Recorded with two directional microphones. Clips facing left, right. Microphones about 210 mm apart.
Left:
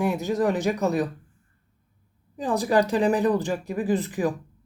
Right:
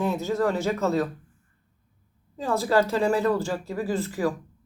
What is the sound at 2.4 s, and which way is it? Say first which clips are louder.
Speech: left 1 dB; 15° left (ahead or behind).